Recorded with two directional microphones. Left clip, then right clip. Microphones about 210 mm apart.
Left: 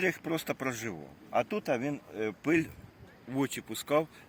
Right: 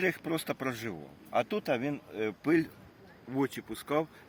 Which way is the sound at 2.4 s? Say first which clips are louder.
Right 1 dB; 20° left (ahead or behind).